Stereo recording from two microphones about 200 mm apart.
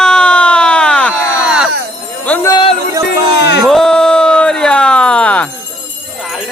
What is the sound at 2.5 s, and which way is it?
Music, 25° left (ahead or behind).